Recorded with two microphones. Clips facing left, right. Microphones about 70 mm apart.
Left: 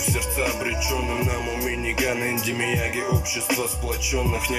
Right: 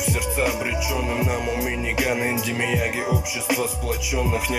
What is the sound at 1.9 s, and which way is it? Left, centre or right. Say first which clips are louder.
Music: right 3 dB; right.